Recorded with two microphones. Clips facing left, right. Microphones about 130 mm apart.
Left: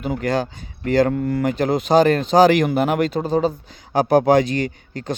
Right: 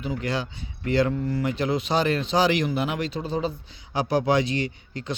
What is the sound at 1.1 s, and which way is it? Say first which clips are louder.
Speech: left 6 dB; 55° left (ahead or behind).